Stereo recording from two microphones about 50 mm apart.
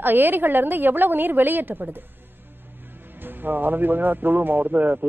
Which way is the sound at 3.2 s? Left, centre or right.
Right.